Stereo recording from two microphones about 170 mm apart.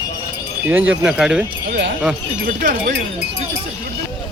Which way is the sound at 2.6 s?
60° right (ahead or behind).